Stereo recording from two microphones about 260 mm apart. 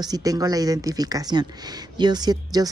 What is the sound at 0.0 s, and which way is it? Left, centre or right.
Speech, centre.